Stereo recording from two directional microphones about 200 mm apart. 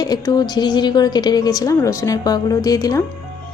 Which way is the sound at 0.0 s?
20° left (ahead or behind).